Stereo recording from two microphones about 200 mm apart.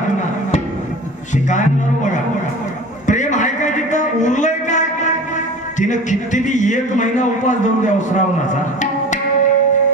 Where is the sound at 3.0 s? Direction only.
35° left (ahead or behind).